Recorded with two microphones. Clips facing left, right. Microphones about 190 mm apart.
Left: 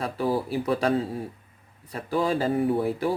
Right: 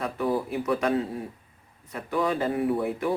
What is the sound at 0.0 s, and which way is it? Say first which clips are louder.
Speech: left 1 dB; 30° left (ahead or behind).